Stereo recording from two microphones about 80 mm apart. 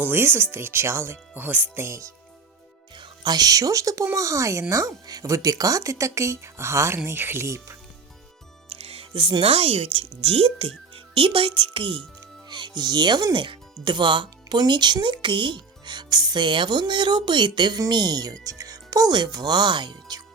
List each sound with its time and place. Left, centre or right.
0.0 s speech: right
1.9 s speech: right
2.9 s speech: right
9.1 s speech: right
11.1 s speech: right
12.5 s speech: right